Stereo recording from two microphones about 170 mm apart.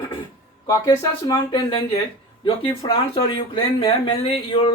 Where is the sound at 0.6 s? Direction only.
20° left (ahead or behind).